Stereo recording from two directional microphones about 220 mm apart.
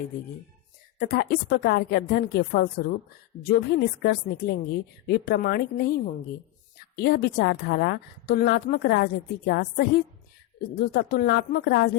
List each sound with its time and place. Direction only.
0.9 s a woman's voice: 45° left (ahead or behind)